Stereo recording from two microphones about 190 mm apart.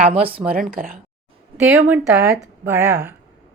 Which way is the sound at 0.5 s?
50° right (ahead or behind).